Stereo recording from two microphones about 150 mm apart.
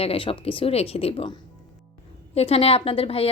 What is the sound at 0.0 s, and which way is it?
A woman's voice, 40° left (ahead or behind).